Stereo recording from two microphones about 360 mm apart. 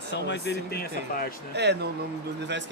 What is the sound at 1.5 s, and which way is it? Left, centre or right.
Speech, right.